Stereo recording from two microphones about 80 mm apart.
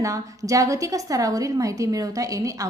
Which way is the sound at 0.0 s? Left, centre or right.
Right.